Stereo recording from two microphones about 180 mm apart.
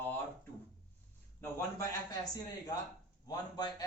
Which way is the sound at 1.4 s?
15° left (ahead or behind).